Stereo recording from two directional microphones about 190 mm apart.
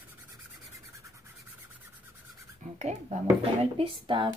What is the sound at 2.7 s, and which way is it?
Speech, 35° right (ahead or behind).